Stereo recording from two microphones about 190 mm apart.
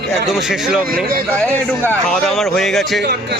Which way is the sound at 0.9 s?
50° right (ahead or behind).